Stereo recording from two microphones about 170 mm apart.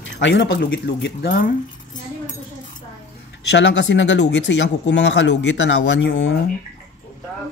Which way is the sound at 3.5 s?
90° left.